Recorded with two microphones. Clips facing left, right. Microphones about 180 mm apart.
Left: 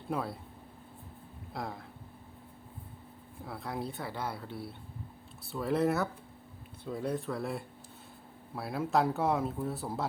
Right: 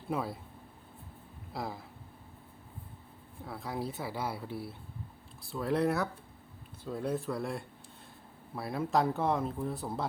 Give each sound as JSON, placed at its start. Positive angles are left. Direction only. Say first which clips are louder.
{"t": 0.1, "sound": "speech", "louder": "even", "side_deg": 0}
{"t": 1.5, "sound": "speech", "louder": "right 1 dB", "side_deg": 0}
{"t": 3.4, "sound": "speech", "louder": "right 1 dB", "side_deg": 0}